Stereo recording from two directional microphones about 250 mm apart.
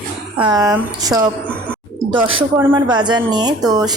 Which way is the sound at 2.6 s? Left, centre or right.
Centre.